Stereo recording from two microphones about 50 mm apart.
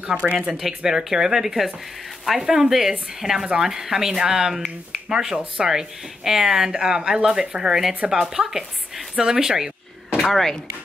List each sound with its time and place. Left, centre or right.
0.0 s speech: right
0.6 s a woman's voice: centre
10.1 s speech: centre